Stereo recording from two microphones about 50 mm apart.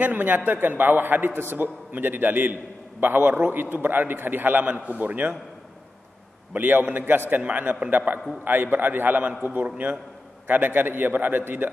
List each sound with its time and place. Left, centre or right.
0.0 s a man's voice: right
6.5 s a man's voice: right